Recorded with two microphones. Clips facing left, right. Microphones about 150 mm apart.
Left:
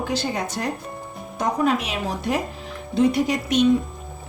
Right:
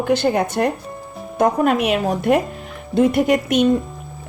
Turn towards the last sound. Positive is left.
turn(degrees=-55)  # may be behind; listen again after turning